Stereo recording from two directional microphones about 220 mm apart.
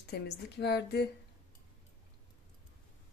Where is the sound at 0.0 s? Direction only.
50° left (ahead or behind).